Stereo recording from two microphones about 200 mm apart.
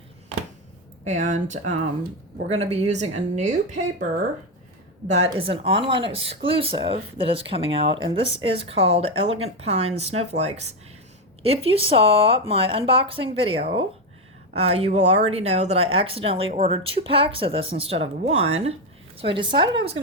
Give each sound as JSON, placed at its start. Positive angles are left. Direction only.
{"t": 1.0, "sound": "a woman's voice", "side_deg": -40}
{"t": 5.1, "sound": "speech", "side_deg": -30}